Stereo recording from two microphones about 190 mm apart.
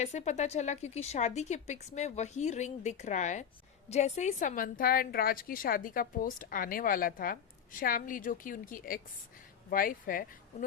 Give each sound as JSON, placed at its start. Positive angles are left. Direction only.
{"t": 0.0, "sound": "a woman's voice", "side_deg": 35}